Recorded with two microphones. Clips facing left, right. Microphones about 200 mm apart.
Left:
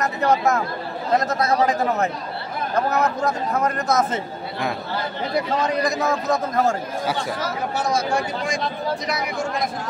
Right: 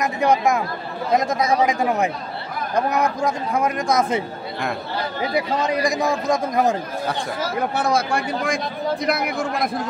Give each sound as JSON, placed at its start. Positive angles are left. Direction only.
{"t": 0.0, "sound": "a man's voice", "side_deg": -15}
{"t": 5.3, "sound": "a man's voice", "side_deg": -10}
{"t": 7.7, "sound": "speech", "side_deg": -60}